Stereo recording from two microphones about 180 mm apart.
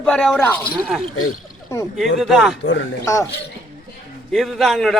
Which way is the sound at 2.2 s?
Centre (ahead or behind).